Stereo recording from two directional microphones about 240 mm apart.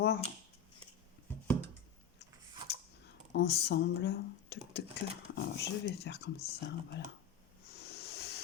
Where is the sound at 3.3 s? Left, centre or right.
Left.